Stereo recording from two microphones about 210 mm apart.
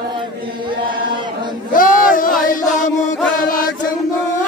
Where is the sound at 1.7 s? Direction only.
40° left (ahead or behind).